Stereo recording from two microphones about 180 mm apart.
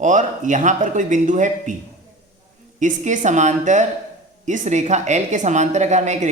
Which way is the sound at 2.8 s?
45° right (ahead or behind).